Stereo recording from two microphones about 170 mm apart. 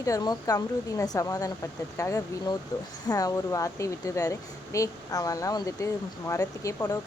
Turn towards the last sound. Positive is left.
turn(degrees=20)  # may be behind; listen again after turning